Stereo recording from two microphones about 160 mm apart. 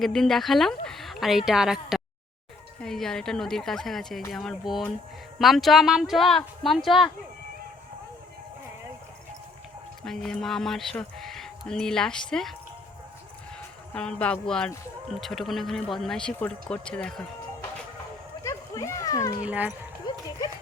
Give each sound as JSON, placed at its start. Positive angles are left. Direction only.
{"t": 0.0, "sound": "speech", "side_deg": 0}
{"t": 10.0, "sound": "speech", "side_deg": 5}
{"t": 13.9, "sound": "speech", "side_deg": 5}
{"t": 18.4, "sound": "a sound", "side_deg": 20}
{"t": 19.5, "sound": "speech", "side_deg": -10}